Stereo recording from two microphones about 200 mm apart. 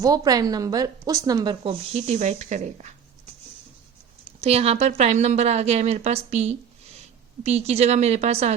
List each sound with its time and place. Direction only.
0.0 s a woman's voice: 20° right (ahead or behind); by 2.9 s 35° right (ahead or behind)
4.4 s a woman's voice: 30° right (ahead or behind)